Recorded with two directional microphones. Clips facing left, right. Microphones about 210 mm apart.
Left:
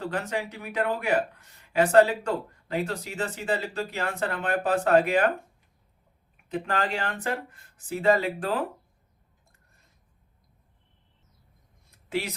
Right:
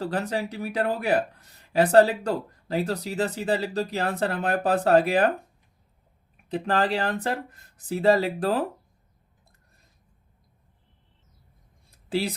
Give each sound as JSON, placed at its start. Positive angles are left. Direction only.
{"t": 0.0, "sound": "speech", "side_deg": -35}
{"t": 6.5, "sound": "speech", "side_deg": -35}
{"t": 12.0, "sound": "speech", "side_deg": -35}